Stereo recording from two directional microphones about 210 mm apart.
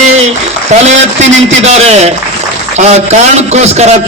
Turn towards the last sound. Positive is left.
turn(degrees=-30)  # may be behind; listen again after turning